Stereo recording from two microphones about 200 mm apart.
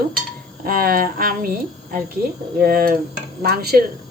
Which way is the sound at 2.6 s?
50° right (ahead or behind).